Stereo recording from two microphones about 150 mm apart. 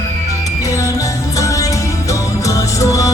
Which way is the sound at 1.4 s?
20° left (ahead or behind).